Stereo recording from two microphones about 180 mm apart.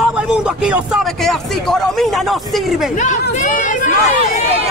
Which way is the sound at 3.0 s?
40° left (ahead or behind).